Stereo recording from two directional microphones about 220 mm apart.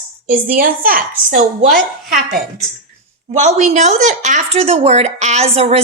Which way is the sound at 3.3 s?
35° right (ahead or behind).